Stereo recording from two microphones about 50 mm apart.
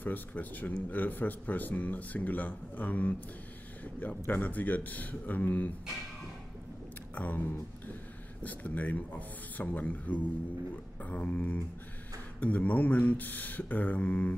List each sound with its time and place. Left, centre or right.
0.0 s speech: left
7.2 s speech: left